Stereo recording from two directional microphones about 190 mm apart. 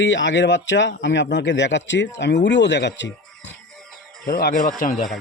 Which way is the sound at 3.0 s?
70° left (ahead or behind).